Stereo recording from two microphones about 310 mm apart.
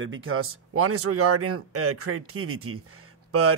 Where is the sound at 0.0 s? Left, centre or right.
Right.